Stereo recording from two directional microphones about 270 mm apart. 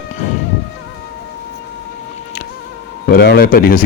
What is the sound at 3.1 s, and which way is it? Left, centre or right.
Speech, left.